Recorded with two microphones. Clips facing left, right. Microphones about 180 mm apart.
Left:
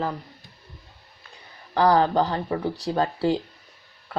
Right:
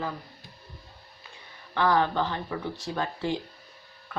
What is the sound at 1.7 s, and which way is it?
Speech, 35° left (ahead or behind).